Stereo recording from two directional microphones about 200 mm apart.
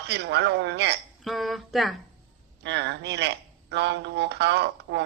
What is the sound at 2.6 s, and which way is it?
Speech, 60° right (ahead or behind).